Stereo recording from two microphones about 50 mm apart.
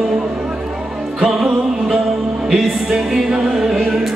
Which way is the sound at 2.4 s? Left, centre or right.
Centre.